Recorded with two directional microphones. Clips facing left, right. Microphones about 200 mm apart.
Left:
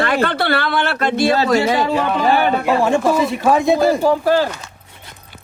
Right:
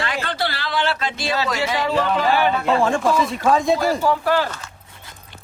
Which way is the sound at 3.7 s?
20° left (ahead or behind).